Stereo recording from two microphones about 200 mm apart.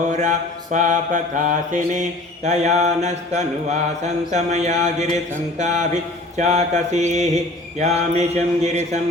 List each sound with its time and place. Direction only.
0.1 s mantra: 35° right (ahead or behind)